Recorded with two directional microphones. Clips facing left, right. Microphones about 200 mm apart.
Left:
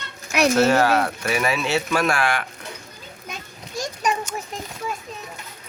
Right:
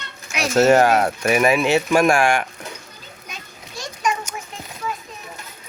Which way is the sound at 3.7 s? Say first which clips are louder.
Even; 35° left (ahead or behind).